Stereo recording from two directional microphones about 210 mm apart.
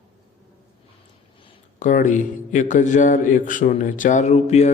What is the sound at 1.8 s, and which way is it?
A man's voice, 35° left (ahead or behind).